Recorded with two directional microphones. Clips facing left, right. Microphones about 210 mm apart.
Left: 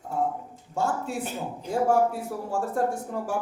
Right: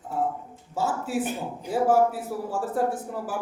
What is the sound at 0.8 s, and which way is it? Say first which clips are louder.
A man's voice: right 1 dB; 5° right (ahead or behind).